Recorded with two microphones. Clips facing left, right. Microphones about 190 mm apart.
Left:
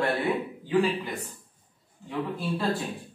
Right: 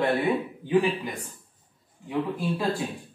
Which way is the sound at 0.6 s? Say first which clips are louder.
Right 1 dB; 15° right (ahead or behind).